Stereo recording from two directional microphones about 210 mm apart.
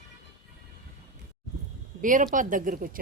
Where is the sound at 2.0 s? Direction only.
40° right (ahead or behind).